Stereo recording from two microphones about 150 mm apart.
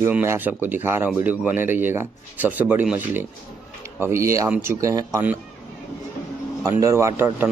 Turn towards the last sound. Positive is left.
turn(degrees=-15)  # may be behind; listen again after turning